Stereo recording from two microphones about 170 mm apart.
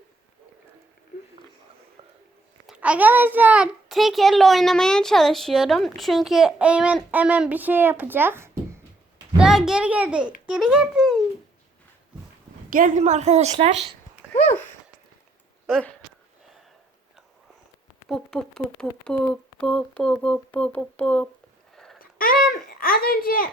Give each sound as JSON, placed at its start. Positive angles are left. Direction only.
{"t": 2.0, "sound": "a sound", "side_deg": -35}
{"t": 2.6, "sound": "a child's voice", "side_deg": -5}
{"t": 9.4, "sound": "a child's voice", "side_deg": 0}
{"t": 12.7, "sound": "a woman's voice", "side_deg": -50}
{"t": 15.6, "sound": "speech", "side_deg": 0}
{"t": 18.1, "sound": "a child's voice", "side_deg": 0}
{"t": 22.2, "sound": "a child's voice", "side_deg": 60}